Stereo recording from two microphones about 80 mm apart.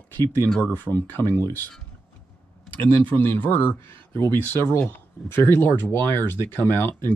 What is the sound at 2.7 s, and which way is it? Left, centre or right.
Speech, left.